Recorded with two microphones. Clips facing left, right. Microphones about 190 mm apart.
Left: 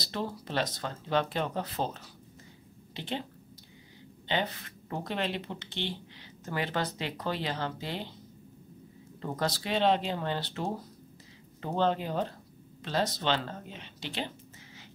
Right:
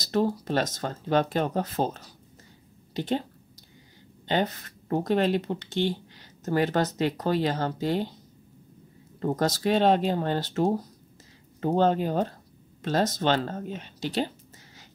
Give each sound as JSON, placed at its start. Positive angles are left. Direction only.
{"t": 0.0, "sound": "speech", "side_deg": -45}
{"t": 4.3, "sound": "speech", "side_deg": -45}
{"t": 9.2, "sound": "speech", "side_deg": -45}